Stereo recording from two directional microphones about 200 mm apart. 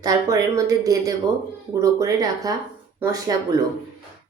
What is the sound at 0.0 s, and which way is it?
Speech, 15° right (ahead or behind).